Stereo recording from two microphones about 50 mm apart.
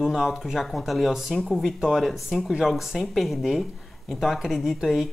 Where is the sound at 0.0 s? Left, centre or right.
Centre.